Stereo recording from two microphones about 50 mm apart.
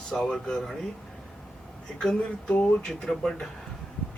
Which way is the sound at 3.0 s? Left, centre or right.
Centre.